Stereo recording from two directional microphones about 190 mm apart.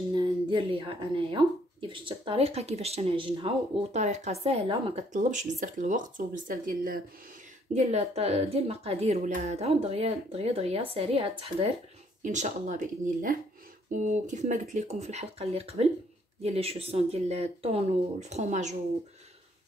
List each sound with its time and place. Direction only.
0.1 s speech: 25° right (ahead or behind); by 7.0 s 50° right (ahead or behind)
7.7 s speech: 35° right (ahead or behind)